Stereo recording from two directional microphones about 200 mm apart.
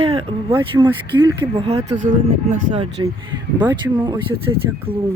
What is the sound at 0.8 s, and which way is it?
Speech, 25° right (ahead or behind).